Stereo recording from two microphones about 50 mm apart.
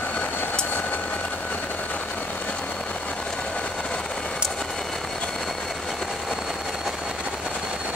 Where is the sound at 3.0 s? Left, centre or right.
Left; by 6.9 s centre.